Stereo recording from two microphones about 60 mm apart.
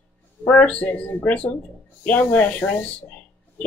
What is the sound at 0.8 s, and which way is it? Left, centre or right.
Speech, left.